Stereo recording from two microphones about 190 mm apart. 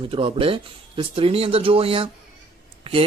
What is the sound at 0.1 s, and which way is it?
Speech, 30° right (ahead or behind).